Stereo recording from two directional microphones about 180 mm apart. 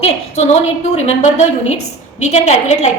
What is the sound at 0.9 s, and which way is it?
A woman's voice, 40° left (ahead or behind).